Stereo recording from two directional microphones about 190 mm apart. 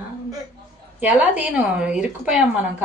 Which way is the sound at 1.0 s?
5° right (ahead or behind).